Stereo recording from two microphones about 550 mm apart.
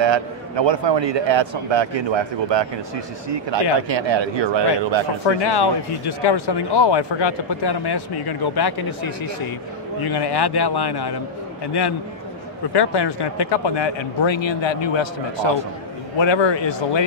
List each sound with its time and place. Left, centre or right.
0.0 s a man's voice: right
3.9 s a man's voice: right
5.2 s speech: left
12.7 s speech: left